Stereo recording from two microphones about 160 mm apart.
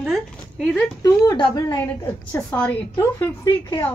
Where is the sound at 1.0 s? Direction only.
25° left (ahead or behind).